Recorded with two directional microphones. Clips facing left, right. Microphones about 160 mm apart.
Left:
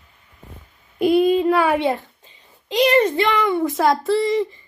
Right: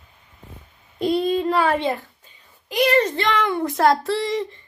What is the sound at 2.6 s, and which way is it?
A child's voice, 20° left (ahead or behind).